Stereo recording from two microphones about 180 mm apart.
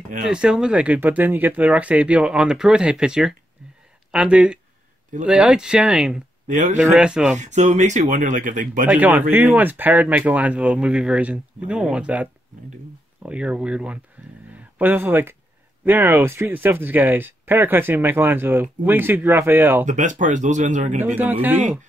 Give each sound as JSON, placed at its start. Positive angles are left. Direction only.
{"t": 0.3, "sound": "speech", "side_deg": -5}
{"t": 6.4, "sound": "speech", "side_deg": -40}
{"t": 6.8, "sound": "speech", "side_deg": -5}
{"t": 7.3, "sound": "speech", "side_deg": -40}
{"t": 8.8, "sound": "speech", "side_deg": -10}
{"t": 14.5, "sound": "a sound", "side_deg": -10}
{"t": 15.8, "sound": "speech", "side_deg": -10}
{"t": 19.9, "sound": "speech", "side_deg": -45}
{"t": 21.0, "sound": "speech", "side_deg": -10}